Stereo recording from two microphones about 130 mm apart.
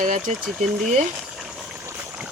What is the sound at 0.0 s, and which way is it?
Speech, 80° right.